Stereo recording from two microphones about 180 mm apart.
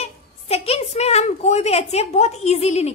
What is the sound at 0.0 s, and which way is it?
A woman's voice, 35° left (ahead or behind).